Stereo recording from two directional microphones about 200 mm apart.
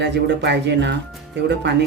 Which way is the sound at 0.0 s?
60° right (ahead or behind).